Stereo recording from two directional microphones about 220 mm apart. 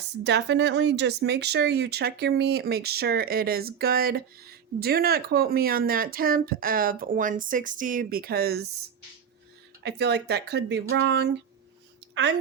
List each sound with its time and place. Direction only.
0.3 s speech: 50° right (ahead or behind)
9.8 s speech: 50° right (ahead or behind)
10.8 s a sound: 55° right (ahead or behind)